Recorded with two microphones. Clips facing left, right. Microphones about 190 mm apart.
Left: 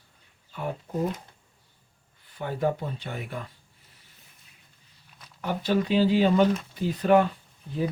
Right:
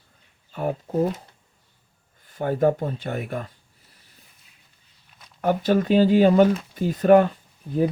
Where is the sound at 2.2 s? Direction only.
45° right (ahead or behind).